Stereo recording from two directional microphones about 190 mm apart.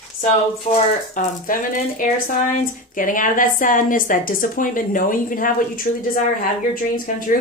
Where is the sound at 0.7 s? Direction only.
40° left (ahead or behind).